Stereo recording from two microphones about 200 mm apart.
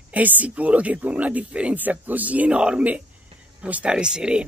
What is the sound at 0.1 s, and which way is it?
Speech, 10° right (ahead or behind).